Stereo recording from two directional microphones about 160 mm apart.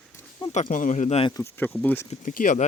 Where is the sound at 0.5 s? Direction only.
55° left (ahead or behind).